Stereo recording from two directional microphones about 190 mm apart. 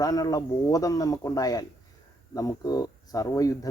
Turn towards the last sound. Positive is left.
turn(degrees=20)  # may be behind; listen again after turning